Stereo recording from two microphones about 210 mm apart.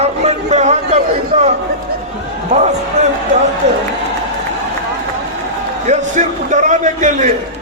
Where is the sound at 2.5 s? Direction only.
35° right (ahead or behind).